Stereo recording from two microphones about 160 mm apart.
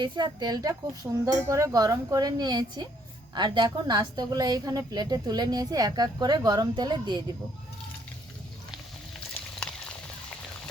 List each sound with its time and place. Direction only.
0.0 s a woman's voice: 25° right (ahead or behind)